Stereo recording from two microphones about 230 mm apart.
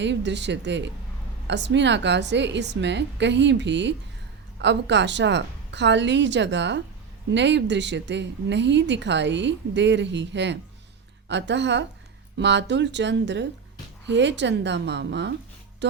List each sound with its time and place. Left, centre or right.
0.0 s speech: right
15.8 s music: right